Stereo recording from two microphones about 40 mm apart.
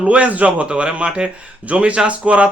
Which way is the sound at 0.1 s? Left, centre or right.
Right.